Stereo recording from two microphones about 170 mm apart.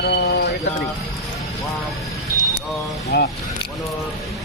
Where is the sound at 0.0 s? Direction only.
70° left (ahead or behind).